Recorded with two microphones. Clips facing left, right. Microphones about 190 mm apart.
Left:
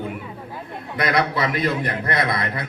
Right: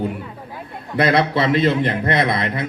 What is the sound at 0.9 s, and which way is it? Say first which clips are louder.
A man's voice: right 5 dB; 30° right (ahead or behind).